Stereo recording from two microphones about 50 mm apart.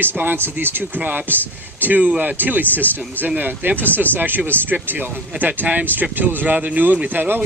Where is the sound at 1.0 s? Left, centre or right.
Right.